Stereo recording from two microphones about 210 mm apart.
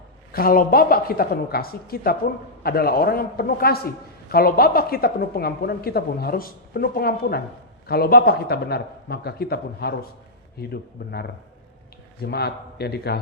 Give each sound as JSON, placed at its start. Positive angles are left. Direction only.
{"t": 0.3, "sound": "speech", "side_deg": 45}